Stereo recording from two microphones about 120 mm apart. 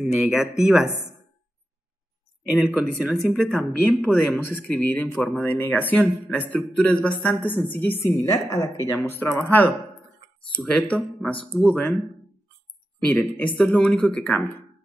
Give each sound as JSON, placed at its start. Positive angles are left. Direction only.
{"t": 0.0, "sound": "speech", "side_deg": -5}
{"t": 2.5, "sound": "speech", "side_deg": -5}
{"t": 3.2, "sound": "a woman's voice", "side_deg": 5}
{"t": 9.4, "sound": "speech", "side_deg": 15}
{"t": 13.1, "sound": "speech", "side_deg": 10}